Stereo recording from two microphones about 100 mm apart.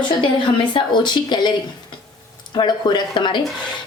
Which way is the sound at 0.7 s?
50° left (ahead or behind).